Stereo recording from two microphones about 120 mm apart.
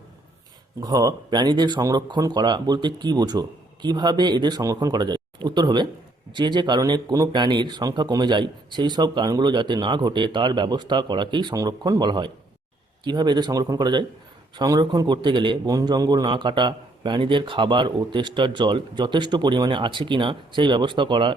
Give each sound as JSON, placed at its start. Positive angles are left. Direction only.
{"t": 0.8, "sound": "a man's voice", "side_deg": -30}